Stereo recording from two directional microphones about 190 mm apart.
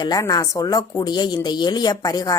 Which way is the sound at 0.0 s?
20° left (ahead or behind).